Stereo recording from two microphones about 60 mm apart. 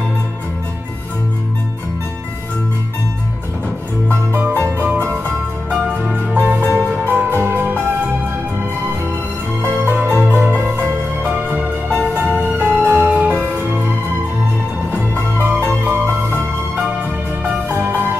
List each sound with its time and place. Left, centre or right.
4.4 s music: right
6.3 s music: right
9.6 s music: right
11.2 s music: right
14.9 s music: right
17.6 s music: right